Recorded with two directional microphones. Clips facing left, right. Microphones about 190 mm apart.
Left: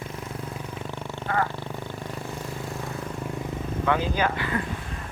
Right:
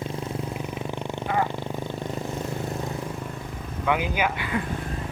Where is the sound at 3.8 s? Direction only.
15° right (ahead or behind).